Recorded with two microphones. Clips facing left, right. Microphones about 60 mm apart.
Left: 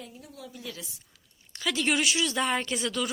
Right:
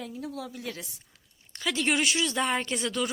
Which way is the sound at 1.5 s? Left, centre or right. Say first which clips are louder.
Even; right.